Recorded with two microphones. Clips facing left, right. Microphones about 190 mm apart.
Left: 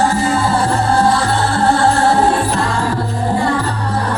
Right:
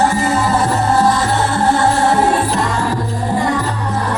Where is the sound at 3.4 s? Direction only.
20° right (ahead or behind).